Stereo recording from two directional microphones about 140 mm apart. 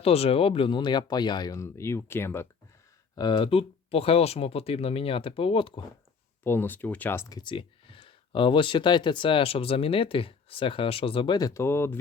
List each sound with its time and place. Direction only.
0.0 s speech: 45° left (ahead or behind); by 2.5 s 15° left (ahead or behind)
3.2 s speech: 35° left (ahead or behind)
6.4 s speech: 15° left (ahead or behind)
7.3 s speech: 35° left (ahead or behind); by 11.9 s 15° left (ahead or behind)